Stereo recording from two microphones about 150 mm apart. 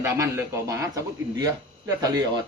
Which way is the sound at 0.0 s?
20° right (ahead or behind).